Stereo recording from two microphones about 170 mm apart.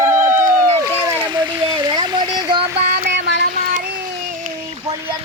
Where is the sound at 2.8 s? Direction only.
65° right (ahead or behind).